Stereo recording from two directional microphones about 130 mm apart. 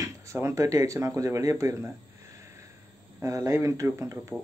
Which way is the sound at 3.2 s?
25° right (ahead or behind).